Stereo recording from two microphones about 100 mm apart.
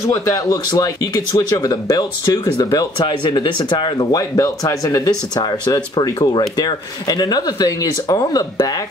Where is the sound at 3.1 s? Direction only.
50° left (ahead or behind).